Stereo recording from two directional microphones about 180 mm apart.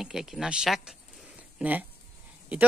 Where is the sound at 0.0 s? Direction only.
5° right (ahead or behind).